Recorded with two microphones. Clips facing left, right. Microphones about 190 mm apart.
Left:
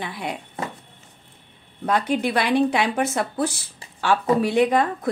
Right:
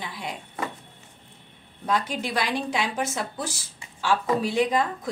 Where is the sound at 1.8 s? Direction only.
60° left (ahead or behind).